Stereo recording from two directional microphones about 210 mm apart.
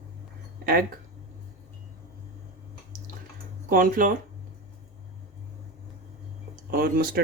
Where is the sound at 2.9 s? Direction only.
40° right (ahead or behind).